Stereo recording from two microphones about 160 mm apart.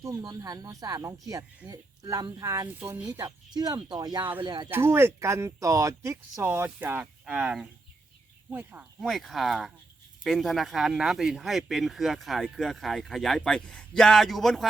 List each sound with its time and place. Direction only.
0.0 s speech: 20° right (ahead or behind)
4.2 s speech: 10° right (ahead or behind)
4.4 s speech: 30° right (ahead or behind)
4.7 s speech: 15° right (ahead or behind)